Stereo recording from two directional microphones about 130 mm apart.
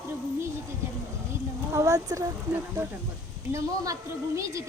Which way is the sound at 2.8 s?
20° right (ahead or behind).